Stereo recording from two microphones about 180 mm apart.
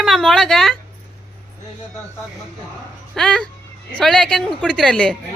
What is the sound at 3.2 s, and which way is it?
A woman's voice, 5° left (ahead or behind).